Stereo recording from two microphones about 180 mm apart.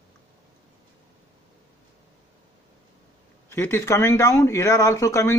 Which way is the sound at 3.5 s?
15° left (ahead or behind).